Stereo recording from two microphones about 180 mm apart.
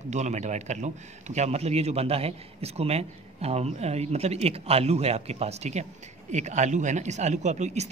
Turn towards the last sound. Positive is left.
turn(degrees=-40)  # may be behind; listen again after turning